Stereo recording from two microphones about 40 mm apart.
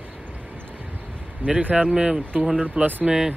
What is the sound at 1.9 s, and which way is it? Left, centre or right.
Speech, centre.